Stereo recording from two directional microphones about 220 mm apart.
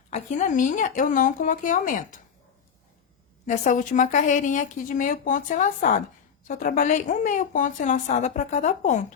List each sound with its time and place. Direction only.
0.1 s a woman's voice: 35° left (ahead or behind)
3.4 s a woman's voice: 35° left (ahead or behind)